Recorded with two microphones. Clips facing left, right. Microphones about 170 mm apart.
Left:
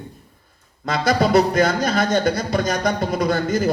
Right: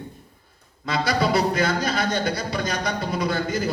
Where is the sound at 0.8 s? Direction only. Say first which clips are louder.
Left 4 dB; 45° left (ahead or behind).